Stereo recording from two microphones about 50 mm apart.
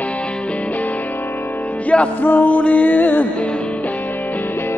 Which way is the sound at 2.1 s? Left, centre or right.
Left.